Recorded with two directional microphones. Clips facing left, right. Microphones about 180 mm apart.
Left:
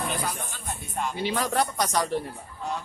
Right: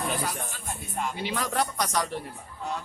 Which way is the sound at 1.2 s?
35° left (ahead or behind).